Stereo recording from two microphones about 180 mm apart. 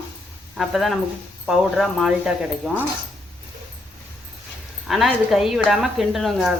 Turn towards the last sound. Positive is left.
turn(degrees=0)  # may be behind; listen again after turning